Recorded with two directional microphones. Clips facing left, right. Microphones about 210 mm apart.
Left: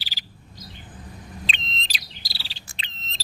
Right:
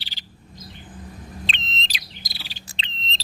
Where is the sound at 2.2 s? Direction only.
20° right (ahead or behind).